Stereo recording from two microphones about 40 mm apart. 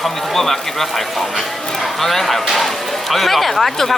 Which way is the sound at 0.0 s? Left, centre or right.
Centre.